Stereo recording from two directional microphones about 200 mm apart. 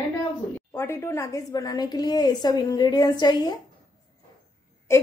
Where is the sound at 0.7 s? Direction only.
10° left (ahead or behind).